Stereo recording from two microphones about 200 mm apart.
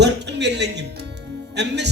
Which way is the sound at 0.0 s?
60° right (ahead or behind).